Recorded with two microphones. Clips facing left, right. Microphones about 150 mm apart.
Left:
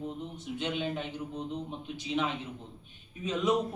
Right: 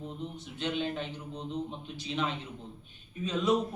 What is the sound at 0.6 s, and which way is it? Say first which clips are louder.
Speech: right 1 dB; 15° left (ahead or behind).